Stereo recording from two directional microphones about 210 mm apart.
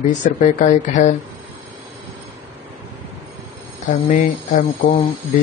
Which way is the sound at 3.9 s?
35° left (ahead or behind).